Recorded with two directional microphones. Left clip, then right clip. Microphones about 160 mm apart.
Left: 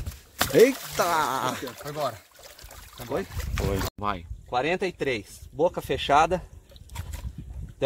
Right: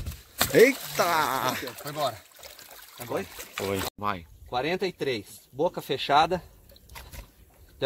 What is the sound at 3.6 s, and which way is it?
Speech, 5° left (ahead or behind).